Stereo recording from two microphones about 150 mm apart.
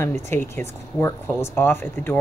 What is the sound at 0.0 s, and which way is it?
Speech, 15° left (ahead or behind).